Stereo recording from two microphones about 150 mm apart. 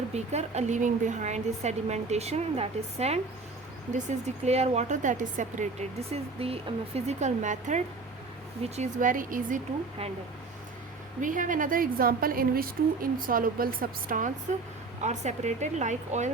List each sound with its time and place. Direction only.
0.1 s speech: 45° right (ahead or behind); by 9.6 s 65° right (ahead or behind)
11.2 s a woman's voice: 60° right (ahead or behind)
15.0 s speech: 50° right (ahead or behind)